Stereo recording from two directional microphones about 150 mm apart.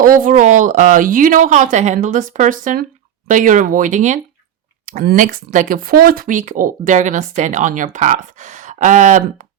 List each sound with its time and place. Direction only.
0.0 s speech: 65° right (ahead or behind)